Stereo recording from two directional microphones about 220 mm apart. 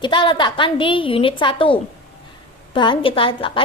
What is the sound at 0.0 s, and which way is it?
A woman's voice, 20° left (ahead or behind).